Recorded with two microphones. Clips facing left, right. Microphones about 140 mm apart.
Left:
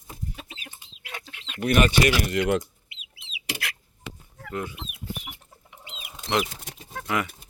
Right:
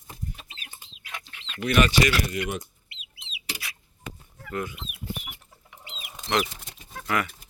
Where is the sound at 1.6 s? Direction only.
45° left (ahead or behind).